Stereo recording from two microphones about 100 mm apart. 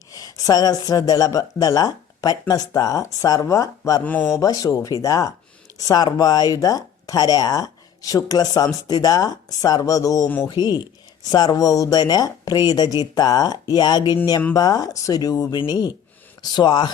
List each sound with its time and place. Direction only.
0.1 s speech: 40° left (ahead or behind)
4.0 s speech: 15° left (ahead or behind)
4.3 s speech: 35° left (ahead or behind)
10.2 s speech: 20° left (ahead or behind)
10.5 s speech: 45° left (ahead or behind)